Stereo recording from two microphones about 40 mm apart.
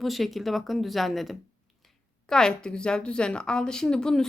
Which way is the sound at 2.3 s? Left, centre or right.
Centre.